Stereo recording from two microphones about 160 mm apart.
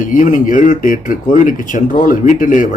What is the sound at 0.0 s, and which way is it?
A man's voice, 55° left (ahead or behind).